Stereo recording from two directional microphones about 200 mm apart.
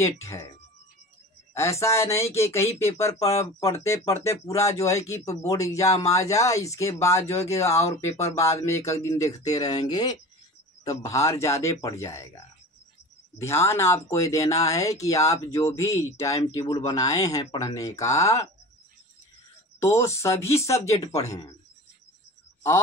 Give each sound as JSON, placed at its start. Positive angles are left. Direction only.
{"t": 0.0, "sound": "speech", "side_deg": 15}
{"t": 1.5, "sound": "speech", "side_deg": 15}
{"t": 13.4, "sound": "speech", "side_deg": 15}
{"t": 19.8, "sound": "speech", "side_deg": 15}